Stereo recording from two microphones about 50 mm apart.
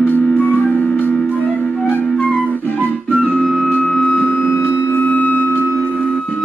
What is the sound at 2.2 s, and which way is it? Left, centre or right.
Flute, left.